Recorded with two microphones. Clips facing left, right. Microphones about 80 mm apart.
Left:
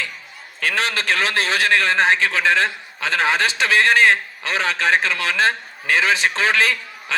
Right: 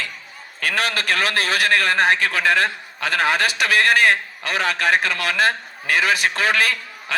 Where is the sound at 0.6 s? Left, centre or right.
Left.